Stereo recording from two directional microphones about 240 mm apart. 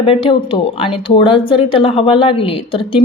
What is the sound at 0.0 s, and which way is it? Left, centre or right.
Speech, left.